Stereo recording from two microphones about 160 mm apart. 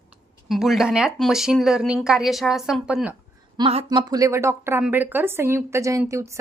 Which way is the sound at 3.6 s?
35° right (ahead or behind).